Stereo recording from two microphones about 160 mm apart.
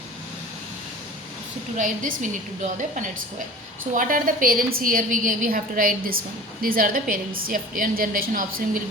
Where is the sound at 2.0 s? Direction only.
55° right (ahead or behind).